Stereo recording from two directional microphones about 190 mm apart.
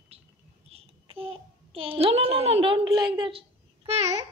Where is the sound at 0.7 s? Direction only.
30° right (ahead or behind).